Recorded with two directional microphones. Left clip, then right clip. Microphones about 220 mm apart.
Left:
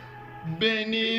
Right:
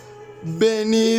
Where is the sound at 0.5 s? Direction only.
25° right (ahead or behind).